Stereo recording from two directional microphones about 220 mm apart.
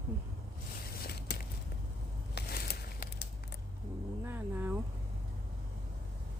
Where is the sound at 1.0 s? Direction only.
45° left (ahead or behind).